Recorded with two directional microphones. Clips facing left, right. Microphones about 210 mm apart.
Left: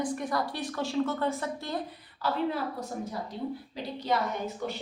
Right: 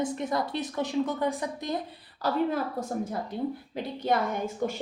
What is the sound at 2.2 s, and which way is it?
A woman's voice, 40° right (ahead or behind).